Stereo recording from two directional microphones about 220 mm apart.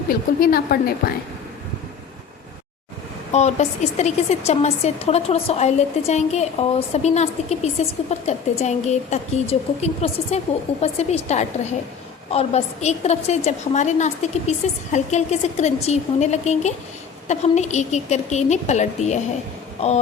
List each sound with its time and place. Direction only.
0.1 s a woman's voice: 40° left (ahead or behind)
3.3 s a woman's voice: 30° left (ahead or behind)